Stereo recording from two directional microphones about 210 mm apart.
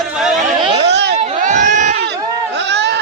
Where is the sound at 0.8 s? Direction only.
55° right (ahead or behind).